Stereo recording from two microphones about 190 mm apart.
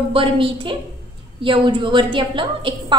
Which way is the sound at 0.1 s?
25° right (ahead or behind).